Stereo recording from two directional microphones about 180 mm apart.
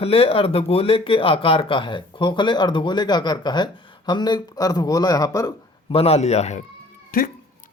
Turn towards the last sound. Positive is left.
turn(degrees=50)  # may be behind; listen again after turning